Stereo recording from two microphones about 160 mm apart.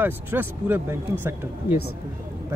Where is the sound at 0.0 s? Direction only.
15° right (ahead or behind).